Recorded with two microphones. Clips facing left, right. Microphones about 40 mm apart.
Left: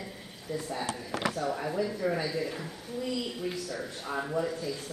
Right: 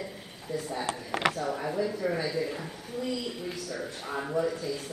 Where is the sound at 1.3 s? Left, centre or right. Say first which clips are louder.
Even; centre.